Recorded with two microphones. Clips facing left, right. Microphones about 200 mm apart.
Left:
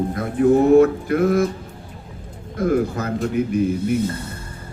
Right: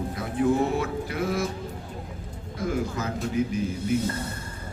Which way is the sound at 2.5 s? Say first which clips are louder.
Left 9 dB; 55° left (ahead or behind).